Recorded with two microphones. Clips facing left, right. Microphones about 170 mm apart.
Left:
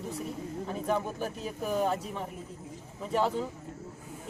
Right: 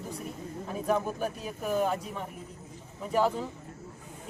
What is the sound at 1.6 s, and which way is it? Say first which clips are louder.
Speech: right 1 dB; centre (ahead or behind).